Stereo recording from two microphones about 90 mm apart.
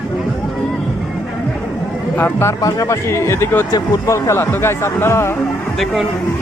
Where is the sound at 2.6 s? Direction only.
40° left (ahead or behind).